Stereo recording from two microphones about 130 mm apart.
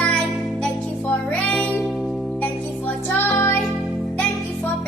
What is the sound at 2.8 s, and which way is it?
Music, 15° left (ahead or behind).